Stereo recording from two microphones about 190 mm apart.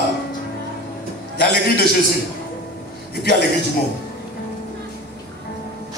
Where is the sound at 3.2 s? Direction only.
60° left (ahead or behind).